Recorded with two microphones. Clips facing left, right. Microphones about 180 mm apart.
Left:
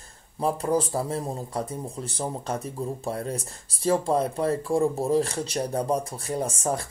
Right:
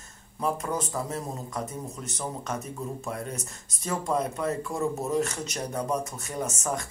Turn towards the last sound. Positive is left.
turn(degrees=30)  # may be behind; listen again after turning